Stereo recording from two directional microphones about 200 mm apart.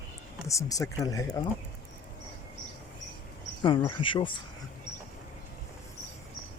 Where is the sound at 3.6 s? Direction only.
25° left (ahead or behind).